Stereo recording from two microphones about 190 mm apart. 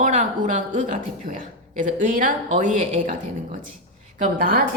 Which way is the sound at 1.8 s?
45° right (ahead or behind).